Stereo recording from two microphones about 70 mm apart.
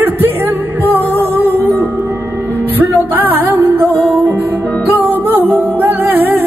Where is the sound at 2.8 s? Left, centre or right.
Right.